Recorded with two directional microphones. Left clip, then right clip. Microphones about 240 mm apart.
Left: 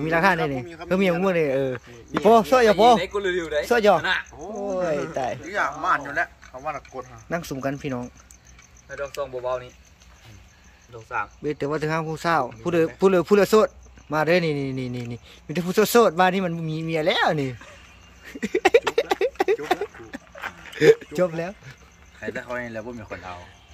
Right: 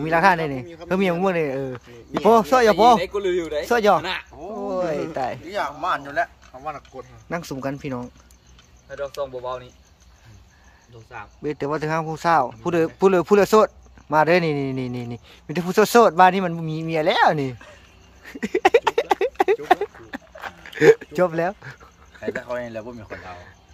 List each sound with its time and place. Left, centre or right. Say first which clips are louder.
0.0 s speech: right 3 dB; centre
3.0 s speech: right 2 dB; right
3.6 s speech: right 1 dB; centre
4.0 s speech: left 4 dB; right
4.6 s speech: even; centre
5.5 s speech: left 3 dB; right
6.1 s speech: right 2 dB; centre
8.8 s speech: right 2 dB; centre
11.1 s speech: left 3 dB; centre
18.2 s a sound: right 2 dB; centre
20.1 s horse: right 4 dB; centre
20.6 s speech: right 2 dB; centre